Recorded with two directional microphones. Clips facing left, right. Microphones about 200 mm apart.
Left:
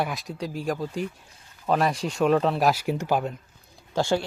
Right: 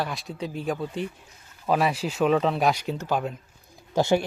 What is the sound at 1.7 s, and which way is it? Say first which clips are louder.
Speech: even; 5° right (ahead or behind).